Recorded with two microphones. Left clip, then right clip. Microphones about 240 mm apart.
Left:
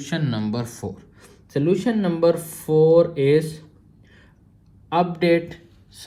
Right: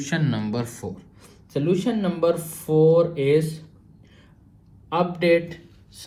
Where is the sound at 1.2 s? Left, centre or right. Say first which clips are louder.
Left 3 dB; left.